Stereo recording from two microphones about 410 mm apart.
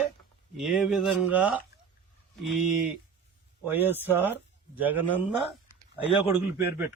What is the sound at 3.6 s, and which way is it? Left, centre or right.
A man's voice, centre.